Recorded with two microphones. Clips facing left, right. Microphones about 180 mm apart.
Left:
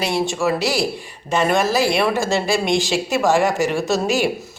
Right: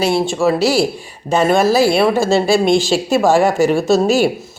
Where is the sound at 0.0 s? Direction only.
30° right (ahead or behind).